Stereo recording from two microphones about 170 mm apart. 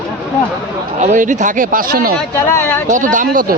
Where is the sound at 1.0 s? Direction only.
45° right (ahead or behind).